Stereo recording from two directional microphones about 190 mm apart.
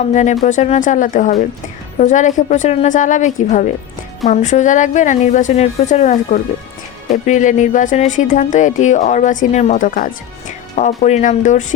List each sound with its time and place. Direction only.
0.1 s speech: 40° left (ahead or behind)